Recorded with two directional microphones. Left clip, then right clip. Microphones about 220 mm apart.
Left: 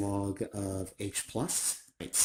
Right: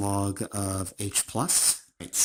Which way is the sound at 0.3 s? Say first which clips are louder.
Right 4 dB; 40° right (ahead or behind).